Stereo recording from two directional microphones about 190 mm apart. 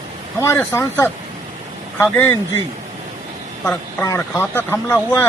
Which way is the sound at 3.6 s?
10° left (ahead or behind).